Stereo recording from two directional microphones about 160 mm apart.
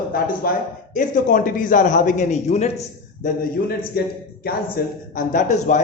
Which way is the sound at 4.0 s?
80° left.